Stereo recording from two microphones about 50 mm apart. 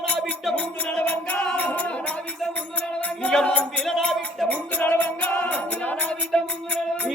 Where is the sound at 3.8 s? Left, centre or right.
Centre.